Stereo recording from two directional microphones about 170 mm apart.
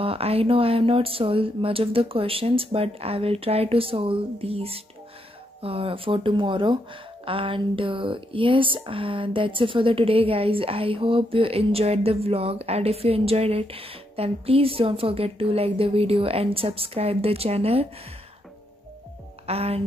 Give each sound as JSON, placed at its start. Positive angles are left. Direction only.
{"t": 0.0, "sound": "speech", "side_deg": -35}
{"t": 19.4, "sound": "speech", "side_deg": -35}